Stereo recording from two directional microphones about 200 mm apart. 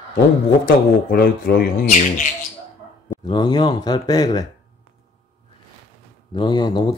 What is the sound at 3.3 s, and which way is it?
Speech, 20° left (ahead or behind).